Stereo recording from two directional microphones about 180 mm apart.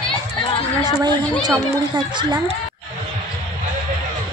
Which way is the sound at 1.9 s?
25° right (ahead or behind).